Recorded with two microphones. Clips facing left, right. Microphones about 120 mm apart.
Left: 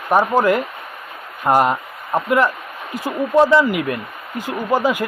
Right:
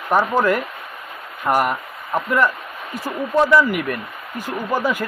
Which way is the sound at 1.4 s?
20° left (ahead or behind).